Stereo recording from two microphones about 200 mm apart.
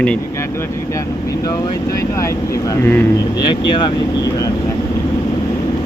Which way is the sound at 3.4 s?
25° left (ahead or behind).